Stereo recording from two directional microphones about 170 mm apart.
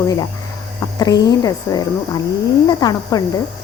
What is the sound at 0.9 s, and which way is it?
Speech, 25° left (ahead or behind).